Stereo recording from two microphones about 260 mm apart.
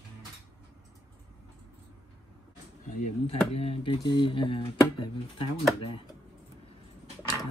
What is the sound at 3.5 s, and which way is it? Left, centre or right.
Speech, left.